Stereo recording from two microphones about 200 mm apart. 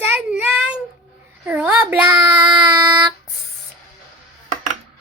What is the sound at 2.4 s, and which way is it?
Child singing, 20° right (ahead or behind).